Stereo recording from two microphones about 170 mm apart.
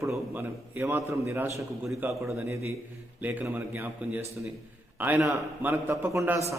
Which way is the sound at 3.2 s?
10° right (ahead or behind).